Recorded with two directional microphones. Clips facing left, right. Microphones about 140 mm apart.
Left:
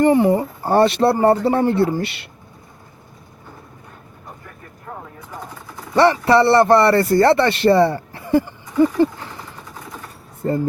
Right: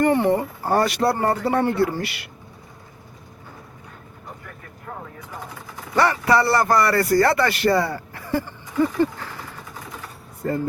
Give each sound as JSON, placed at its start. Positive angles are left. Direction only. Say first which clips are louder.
{"t": 0.0, "sound": "speech", "louder": "left 4 dB", "side_deg": 15}
{"t": 5.9, "sound": "speech", "louder": "left 5 dB", "side_deg": 30}
{"t": 10.4, "sound": "speech", "louder": "left 4 dB", "side_deg": 25}